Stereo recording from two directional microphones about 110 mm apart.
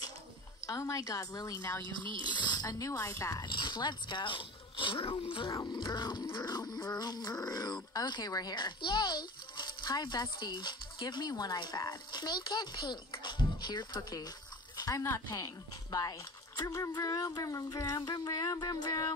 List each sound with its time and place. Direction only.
0.7 s a woman's voice: 30° left (ahead or behind)
1.8 s speech: 45° right (ahead or behind)
2.2 s speech: 40° left (ahead or behind)
3.4 s speech: 45° left (ahead or behind)
5.5 s speech: 40° left (ahead or behind)
14.8 s speech: 30° left (ahead or behind)